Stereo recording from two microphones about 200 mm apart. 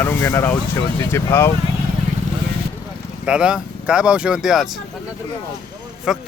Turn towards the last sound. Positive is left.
turn(degrees=0)  # may be behind; listen again after turning